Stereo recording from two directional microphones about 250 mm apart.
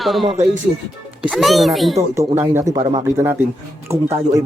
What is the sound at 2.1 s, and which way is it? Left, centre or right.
Speech, centre.